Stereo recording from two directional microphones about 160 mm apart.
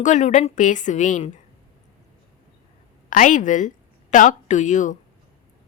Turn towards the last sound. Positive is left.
turn(degrees=50)  # may be behind; listen again after turning